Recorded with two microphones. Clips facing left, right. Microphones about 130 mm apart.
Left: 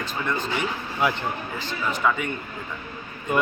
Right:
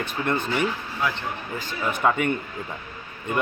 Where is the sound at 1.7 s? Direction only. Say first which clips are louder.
Right 1 dB; 50° right (ahead or behind).